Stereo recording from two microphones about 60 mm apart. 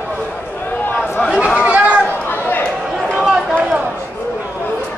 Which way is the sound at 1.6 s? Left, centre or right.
Right.